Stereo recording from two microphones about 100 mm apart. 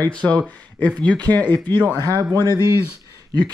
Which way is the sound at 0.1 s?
10° left (ahead or behind).